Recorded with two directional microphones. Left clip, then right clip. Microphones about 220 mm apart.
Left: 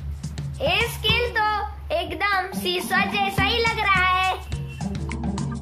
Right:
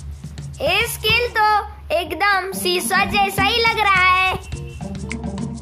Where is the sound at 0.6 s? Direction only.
30° right (ahead or behind).